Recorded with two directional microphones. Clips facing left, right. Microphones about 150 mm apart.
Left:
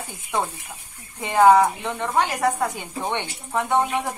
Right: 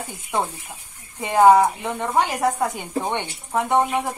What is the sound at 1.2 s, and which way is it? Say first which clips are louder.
Speech: right 1 dB; 10° right (ahead or behind).